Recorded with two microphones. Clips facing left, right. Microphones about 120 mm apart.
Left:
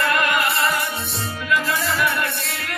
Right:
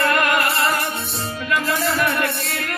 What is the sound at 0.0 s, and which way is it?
Music, 45° right (ahead or behind).